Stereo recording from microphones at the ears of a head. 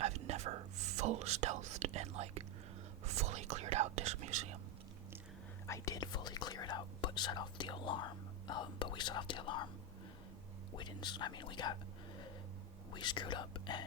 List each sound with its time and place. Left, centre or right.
0.0 s whispering: right
5.6 s whispering: left
10.8 s whispering: left
12.9 s whispering: left